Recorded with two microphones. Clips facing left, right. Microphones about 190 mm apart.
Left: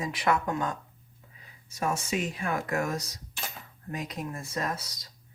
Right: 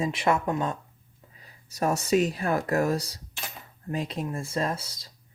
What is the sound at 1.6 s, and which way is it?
Speech, 40° right (ahead or behind).